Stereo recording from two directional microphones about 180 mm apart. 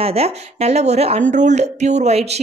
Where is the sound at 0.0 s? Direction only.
35° right (ahead or behind).